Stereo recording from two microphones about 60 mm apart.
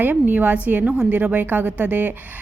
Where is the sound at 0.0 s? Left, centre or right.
Right.